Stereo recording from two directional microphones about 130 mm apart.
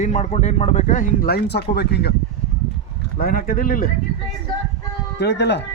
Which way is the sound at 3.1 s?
90° left.